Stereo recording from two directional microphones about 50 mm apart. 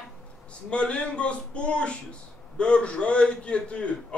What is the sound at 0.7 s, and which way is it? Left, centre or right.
Speech, left.